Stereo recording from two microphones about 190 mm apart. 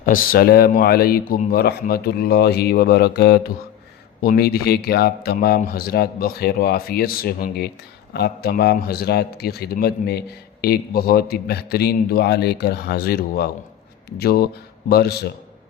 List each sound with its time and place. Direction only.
0.0 s a man's voice: 45° left (ahead or behind)